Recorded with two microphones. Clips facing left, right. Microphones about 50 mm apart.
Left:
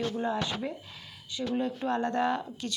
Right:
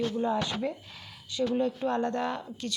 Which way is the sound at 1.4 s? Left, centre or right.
Centre.